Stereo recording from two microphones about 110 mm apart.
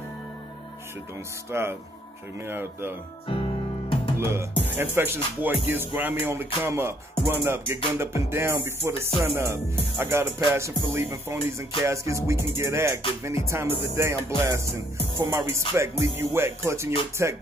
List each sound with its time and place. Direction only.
1.5 s music: 25° right (ahead or behind)
4.2 s music: 25° right (ahead or behind)